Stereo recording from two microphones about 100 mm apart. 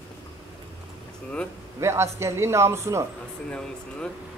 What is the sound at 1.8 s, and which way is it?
A man's voice, 30° right (ahead or behind).